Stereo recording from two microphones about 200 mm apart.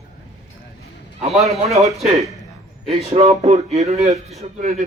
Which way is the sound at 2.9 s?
30° right (ahead or behind).